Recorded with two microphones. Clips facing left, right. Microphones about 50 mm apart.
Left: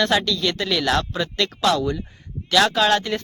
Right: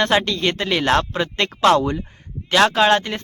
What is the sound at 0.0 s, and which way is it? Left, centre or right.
Speech, right.